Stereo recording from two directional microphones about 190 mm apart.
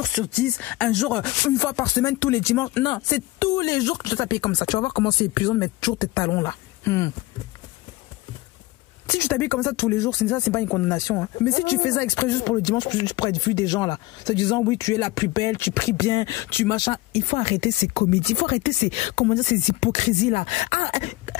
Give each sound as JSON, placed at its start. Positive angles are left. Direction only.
{"t": 0.0, "sound": "speech", "side_deg": 5}
{"t": 9.0, "sound": "speech", "side_deg": 10}
{"t": 17.1, "sound": "speech", "side_deg": 35}